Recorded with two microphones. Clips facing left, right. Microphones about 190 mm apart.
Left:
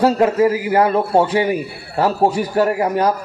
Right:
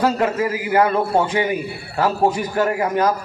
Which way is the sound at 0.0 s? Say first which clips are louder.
Left 5 dB; 35° left (ahead or behind).